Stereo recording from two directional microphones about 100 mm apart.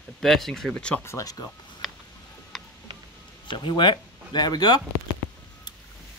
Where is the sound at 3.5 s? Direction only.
50° left (ahead or behind).